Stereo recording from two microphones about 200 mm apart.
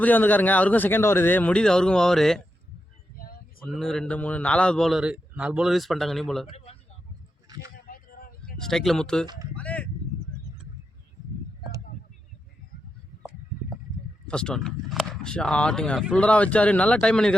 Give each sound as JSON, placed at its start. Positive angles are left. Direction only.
{"t": 0.0, "sound": "speech", "side_deg": 10}
{"t": 3.6, "sound": "speech", "side_deg": 0}
{"t": 7.9, "sound": "a sound", "side_deg": 45}
{"t": 8.6, "sound": "speech", "side_deg": 0}
{"t": 9.2, "sound": "speech", "side_deg": -20}
{"t": 9.6, "sound": "a sound", "side_deg": 5}
{"t": 14.3, "sound": "speech", "side_deg": 5}